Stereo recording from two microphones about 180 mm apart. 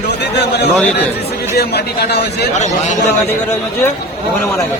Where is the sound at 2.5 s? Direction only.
40° left (ahead or behind).